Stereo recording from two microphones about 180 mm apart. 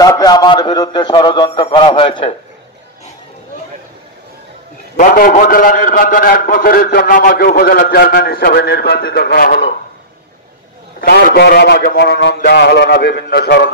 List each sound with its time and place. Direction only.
0.0 s a man's voice: 20° left (ahead or behind)
4.9 s a man's voice: 50° left (ahead or behind)
11.0 s a man's voice: 55° left (ahead or behind)